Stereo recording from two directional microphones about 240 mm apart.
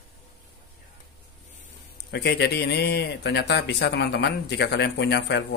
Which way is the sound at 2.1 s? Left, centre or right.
Left.